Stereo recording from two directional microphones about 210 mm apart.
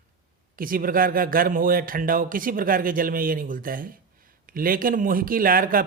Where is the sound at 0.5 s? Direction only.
40° right (ahead or behind).